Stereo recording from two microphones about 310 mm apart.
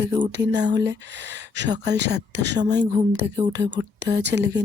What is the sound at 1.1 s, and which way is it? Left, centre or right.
Speech, right.